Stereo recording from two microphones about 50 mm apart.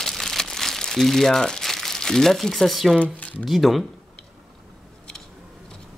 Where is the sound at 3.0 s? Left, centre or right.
Left.